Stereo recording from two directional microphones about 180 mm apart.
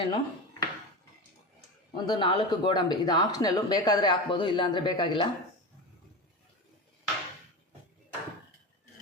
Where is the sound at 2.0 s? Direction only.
25° left (ahead or behind).